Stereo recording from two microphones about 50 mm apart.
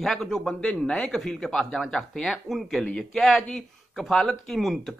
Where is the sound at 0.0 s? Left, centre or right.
Centre.